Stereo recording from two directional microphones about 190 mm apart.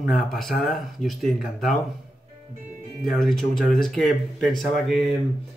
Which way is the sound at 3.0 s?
Centre (ahead or behind).